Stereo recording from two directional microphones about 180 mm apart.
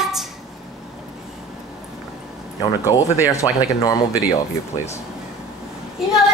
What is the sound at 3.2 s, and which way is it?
Speech, 20° left (ahead or behind).